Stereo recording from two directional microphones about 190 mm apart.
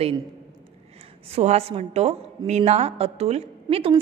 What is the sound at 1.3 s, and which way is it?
A woman's voice, 35° right (ahead or behind).